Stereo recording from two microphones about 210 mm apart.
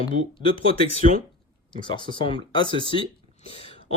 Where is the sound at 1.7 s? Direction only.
20° left (ahead or behind).